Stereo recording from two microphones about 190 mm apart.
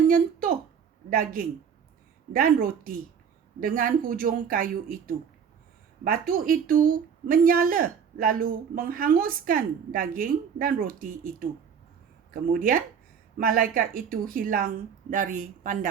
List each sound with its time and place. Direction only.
0.1 s speech: 50° right (ahead or behind)